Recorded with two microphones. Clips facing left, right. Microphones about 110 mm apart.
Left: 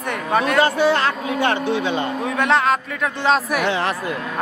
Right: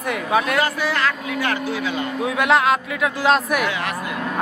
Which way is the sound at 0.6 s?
30° left (ahead or behind).